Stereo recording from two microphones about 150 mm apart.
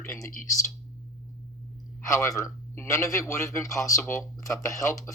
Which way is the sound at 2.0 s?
20° left (ahead or behind).